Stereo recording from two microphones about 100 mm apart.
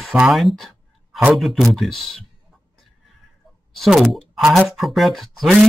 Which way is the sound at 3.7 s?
Centre (ahead or behind).